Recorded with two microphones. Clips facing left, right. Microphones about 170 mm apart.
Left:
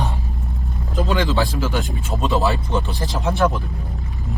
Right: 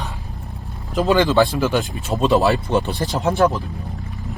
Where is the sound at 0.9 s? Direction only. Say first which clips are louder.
Right 5 dB; 70° right (ahead or behind).